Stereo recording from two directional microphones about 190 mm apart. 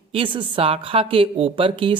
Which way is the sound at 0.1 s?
25° right (ahead or behind).